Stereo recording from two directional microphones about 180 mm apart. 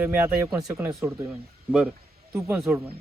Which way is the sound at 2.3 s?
15° right (ahead or behind).